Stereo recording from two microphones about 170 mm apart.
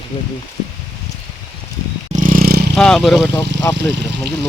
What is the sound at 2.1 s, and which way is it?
Vehicle, 55° right (ahead or behind).